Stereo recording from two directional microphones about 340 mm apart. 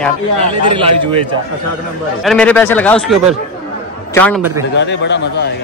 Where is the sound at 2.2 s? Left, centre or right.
Centre.